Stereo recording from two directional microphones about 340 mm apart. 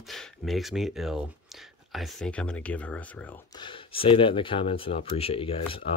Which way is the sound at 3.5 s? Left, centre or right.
Centre.